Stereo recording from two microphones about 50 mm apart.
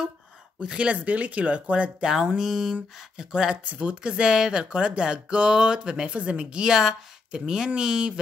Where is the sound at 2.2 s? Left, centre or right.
Centre.